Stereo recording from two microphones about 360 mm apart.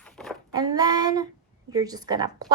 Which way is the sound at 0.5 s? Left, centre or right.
Centre.